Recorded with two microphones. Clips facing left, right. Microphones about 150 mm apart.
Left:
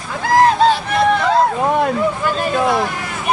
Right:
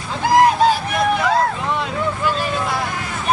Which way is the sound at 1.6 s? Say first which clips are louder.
Left 6 dB; 50° left (ahead or behind).